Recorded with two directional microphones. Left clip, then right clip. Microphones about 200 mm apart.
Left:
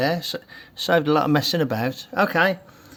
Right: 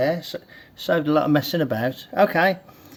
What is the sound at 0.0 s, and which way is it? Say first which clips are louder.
Speech: even; 45° left (ahead or behind).